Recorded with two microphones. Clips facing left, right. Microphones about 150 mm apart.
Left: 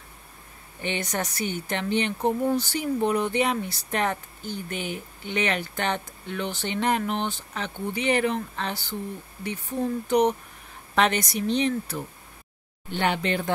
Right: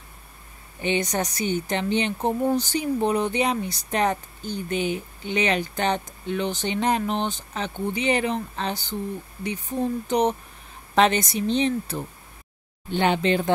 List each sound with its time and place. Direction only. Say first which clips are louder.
0.8 s speech: right 5 dB; 20° right (ahead or behind)